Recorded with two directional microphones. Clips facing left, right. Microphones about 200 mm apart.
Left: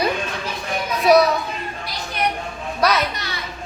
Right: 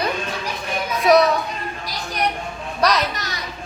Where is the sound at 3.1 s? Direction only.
45° right (ahead or behind).